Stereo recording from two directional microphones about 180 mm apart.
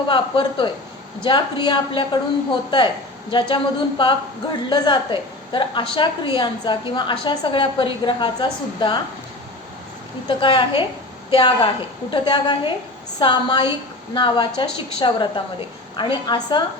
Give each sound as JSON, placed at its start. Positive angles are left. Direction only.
{"t": 0.1, "sound": "a woman's voice", "side_deg": 25}
{"t": 10.2, "sound": "a woman's voice", "side_deg": 25}